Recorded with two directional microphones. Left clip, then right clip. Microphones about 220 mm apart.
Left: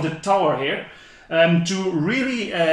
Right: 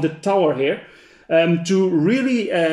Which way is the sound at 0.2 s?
50° right (ahead or behind).